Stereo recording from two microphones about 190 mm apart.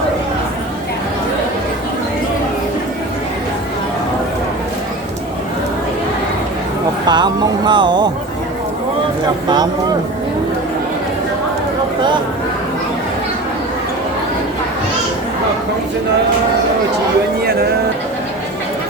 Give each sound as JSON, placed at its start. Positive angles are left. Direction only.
{"t": 7.1, "sound": "speech", "side_deg": -25}